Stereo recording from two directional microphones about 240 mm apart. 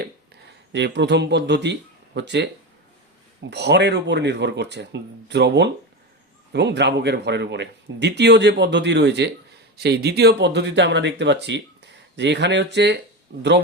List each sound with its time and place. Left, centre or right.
0.7 s speech: right
3.5 s speech: right